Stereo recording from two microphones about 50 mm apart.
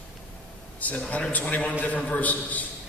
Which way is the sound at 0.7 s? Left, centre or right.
Left.